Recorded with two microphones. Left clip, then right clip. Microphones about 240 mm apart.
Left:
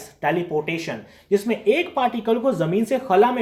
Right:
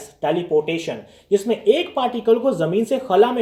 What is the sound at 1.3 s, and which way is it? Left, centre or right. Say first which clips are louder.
Speech: right 2 dB; left.